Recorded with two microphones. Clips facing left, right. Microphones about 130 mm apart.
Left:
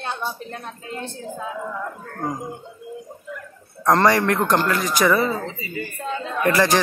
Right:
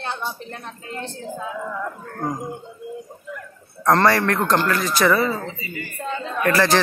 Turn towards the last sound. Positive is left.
turn(degrees=15)  # may be behind; listen again after turning